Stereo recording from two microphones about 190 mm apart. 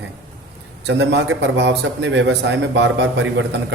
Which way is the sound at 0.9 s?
65° right (ahead or behind).